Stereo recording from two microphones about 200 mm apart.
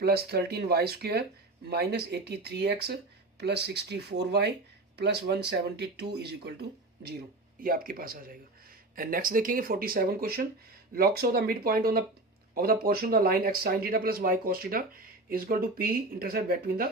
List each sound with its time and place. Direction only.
0.0 s speech: 50° right (ahead or behind)
7.6 s speech: 45° right (ahead or behind)